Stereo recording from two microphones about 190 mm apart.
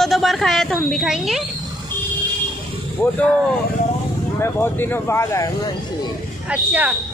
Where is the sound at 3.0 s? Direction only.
5° left (ahead or behind).